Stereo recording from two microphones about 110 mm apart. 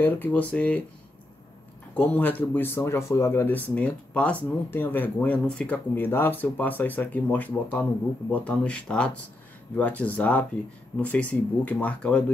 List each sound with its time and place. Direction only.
0.0 s speech: 15° left (ahead or behind)
2.0 s speech: 15° left (ahead or behind)